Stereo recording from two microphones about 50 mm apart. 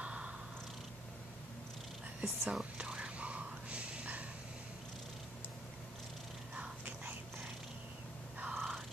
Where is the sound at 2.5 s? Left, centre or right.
Centre.